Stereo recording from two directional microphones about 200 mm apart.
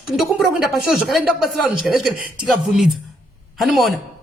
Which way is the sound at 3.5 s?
Centre (ahead or behind).